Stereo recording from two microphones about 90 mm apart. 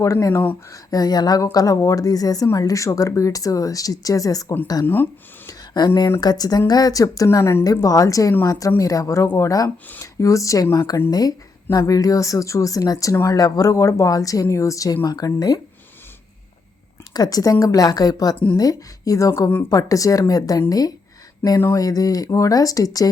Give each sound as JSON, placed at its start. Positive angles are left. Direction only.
{"t": 0.0, "sound": "a woman's voice", "side_deg": 35}
{"t": 0.7, "sound": "a woman's voice", "side_deg": 45}
{"t": 5.5, "sound": "a sound", "side_deg": 50}
{"t": 6.1, "sound": "a woman's voice", "side_deg": 45}
{"t": 7.3, "sound": "speech", "side_deg": 30}
{"t": 7.6, "sound": "a woman's voice", "side_deg": 40}
{"t": 9.6, "sound": "a woman's voice", "side_deg": 30}
{"t": 17.2, "sound": "a woman's voice", "side_deg": 45}